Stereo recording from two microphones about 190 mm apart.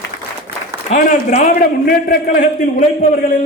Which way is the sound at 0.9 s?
40° left (ahead or behind).